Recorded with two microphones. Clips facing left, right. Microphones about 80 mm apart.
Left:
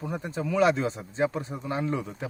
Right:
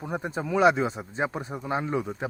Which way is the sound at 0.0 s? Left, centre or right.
Right.